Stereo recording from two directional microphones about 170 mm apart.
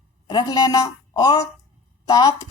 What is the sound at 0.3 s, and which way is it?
Speech, 25° left (ahead or behind).